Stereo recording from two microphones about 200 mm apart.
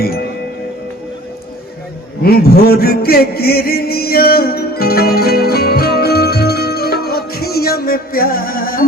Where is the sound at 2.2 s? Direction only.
50° left (ahead or behind).